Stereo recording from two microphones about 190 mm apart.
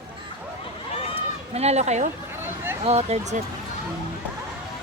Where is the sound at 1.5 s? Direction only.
35° right (ahead or behind).